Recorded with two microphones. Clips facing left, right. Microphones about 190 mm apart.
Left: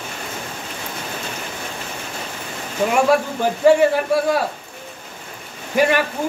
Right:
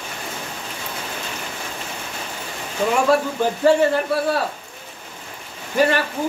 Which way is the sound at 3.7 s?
15° left (ahead or behind).